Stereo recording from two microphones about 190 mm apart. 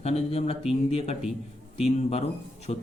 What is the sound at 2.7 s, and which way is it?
Speech, 35° left (ahead or behind).